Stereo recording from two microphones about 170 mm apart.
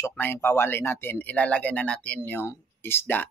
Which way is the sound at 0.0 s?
10° left (ahead or behind).